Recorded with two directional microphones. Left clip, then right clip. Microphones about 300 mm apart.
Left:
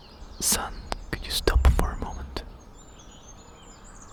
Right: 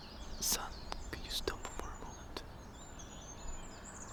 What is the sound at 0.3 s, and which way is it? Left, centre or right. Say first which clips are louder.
Whispering: left 10 dB; left.